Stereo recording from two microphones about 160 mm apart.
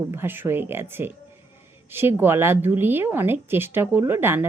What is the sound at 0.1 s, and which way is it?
A woman's voice, 15° right (ahead or behind).